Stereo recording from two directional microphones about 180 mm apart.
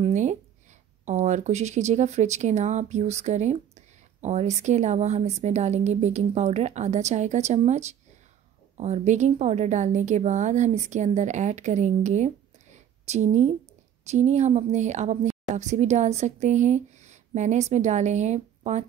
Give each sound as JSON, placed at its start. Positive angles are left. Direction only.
{"t": 0.0, "sound": "speech", "side_deg": -40}